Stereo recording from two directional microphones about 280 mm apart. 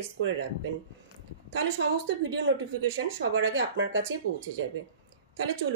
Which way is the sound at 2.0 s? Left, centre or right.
Right.